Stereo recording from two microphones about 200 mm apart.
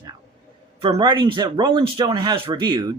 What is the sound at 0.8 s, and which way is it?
Speech, 25° right (ahead or behind).